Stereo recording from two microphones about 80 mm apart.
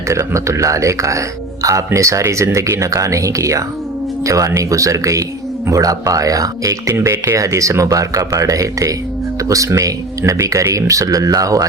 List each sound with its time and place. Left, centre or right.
0.1 s speech: right